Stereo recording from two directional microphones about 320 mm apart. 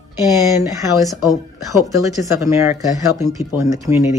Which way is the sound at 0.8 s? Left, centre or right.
Centre.